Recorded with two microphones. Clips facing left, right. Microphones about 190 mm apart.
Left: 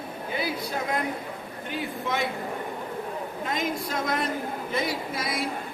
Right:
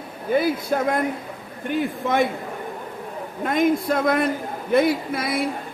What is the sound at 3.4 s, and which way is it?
A man's voice, 55° right (ahead or behind).